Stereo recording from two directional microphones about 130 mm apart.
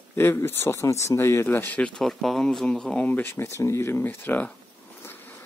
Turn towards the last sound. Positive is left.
turn(degrees=15)  # may be behind; listen again after turning